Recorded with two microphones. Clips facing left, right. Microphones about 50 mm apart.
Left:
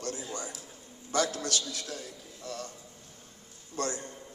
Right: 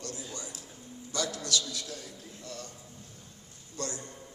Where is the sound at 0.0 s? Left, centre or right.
Left.